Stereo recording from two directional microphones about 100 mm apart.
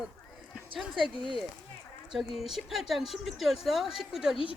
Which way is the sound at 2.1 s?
Centre (ahead or behind).